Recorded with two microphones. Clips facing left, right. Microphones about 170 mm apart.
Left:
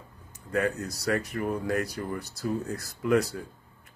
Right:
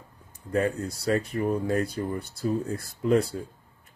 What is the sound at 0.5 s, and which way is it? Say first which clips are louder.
Speech: right 2 dB; 30° right (ahead or behind).